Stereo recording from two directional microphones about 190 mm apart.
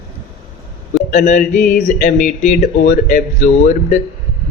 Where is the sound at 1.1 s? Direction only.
40° left (ahead or behind).